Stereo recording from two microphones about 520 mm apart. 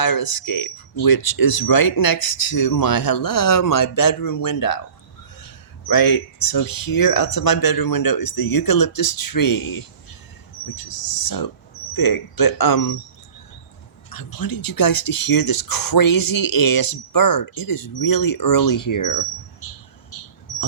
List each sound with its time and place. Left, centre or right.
0.0 s speech: left
5.9 s speech: left
14.1 s speech: left